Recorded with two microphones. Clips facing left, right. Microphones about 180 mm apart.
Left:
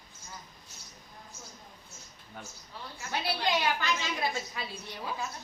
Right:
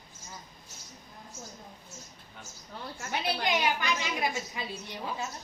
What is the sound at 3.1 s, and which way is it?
A woman's voice, 20° right (ahead or behind).